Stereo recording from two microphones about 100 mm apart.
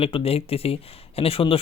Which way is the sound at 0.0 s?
75° left (ahead or behind).